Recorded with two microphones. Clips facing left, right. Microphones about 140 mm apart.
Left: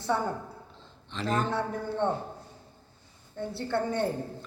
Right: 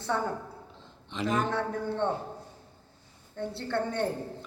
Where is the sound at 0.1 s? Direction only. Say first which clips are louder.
Left 1 dB; 10° left (ahead or behind).